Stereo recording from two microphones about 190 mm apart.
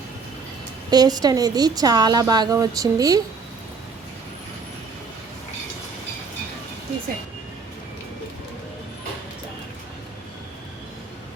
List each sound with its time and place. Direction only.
0.9 s a woman's voice: 20° right (ahead or behind)